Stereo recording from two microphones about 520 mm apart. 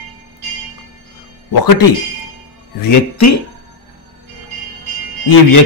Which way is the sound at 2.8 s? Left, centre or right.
Left.